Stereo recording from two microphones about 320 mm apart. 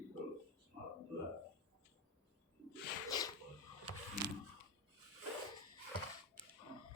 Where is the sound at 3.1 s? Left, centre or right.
Centre.